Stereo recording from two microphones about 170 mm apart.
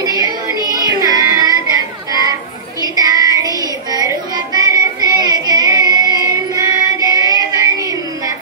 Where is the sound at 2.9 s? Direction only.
20° right (ahead or behind).